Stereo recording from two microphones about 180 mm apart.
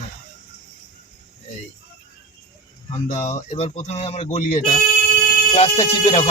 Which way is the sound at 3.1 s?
35° left (ahead or behind).